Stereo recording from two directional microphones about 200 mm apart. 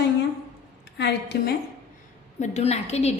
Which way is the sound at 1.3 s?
55° left (ahead or behind).